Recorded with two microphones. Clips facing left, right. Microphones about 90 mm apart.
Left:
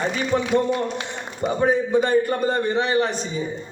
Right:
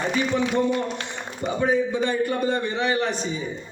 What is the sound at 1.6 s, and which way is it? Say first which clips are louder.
Speech: left 3 dB; 45° left (ahead or behind).